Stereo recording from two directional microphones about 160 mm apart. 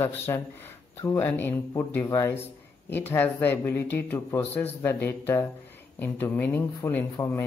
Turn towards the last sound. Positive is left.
turn(degrees=15)  # may be behind; listen again after turning